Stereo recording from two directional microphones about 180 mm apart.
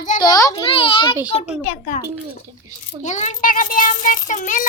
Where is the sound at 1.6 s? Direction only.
40° left (ahead or behind).